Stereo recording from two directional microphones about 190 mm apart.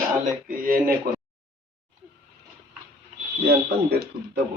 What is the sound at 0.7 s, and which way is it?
Speech, 50° right (ahead or behind).